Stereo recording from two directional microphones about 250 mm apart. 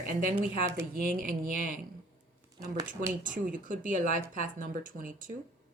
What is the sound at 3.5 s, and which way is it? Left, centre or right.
A woman's voice, right.